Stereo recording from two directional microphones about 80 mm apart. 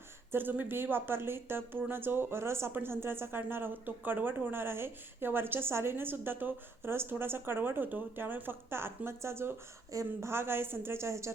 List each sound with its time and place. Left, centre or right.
0.3 s speech: right